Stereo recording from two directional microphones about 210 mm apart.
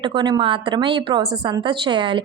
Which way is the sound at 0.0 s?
20° right (ahead or behind).